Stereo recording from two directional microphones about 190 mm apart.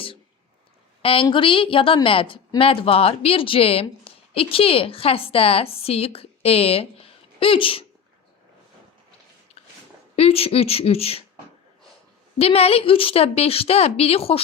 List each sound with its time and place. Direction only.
1.0 s a woman's voice: 30° left (ahead or behind)
9.6 s a sound: 30° left (ahead or behind)
10.2 s a woman's voice: 30° left (ahead or behind)
12.4 s a woman's voice: 30° left (ahead or behind)